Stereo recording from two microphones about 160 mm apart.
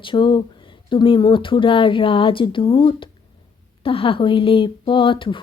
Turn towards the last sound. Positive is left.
turn(degrees=30)  # may be behind; listen again after turning